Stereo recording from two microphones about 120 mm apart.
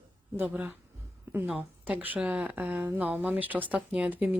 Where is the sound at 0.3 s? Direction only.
15° right (ahead or behind).